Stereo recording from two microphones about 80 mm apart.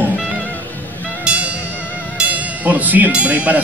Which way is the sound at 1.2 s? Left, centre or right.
Centre.